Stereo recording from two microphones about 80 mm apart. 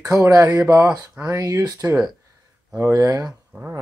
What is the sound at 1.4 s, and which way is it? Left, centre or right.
Speech, right.